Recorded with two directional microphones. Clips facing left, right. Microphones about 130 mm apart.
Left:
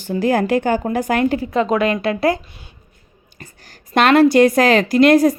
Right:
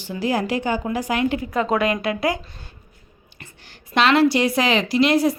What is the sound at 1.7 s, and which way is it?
Speech, 20° right (ahead or behind).